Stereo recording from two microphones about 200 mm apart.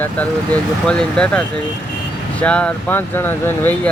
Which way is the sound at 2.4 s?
5° left (ahead or behind).